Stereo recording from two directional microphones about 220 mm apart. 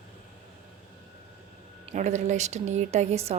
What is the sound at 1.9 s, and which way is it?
A woman's voice, 35° right (ahead or behind).